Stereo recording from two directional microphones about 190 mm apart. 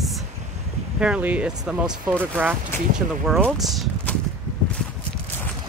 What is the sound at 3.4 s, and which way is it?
Speech, 5° left (ahead or behind).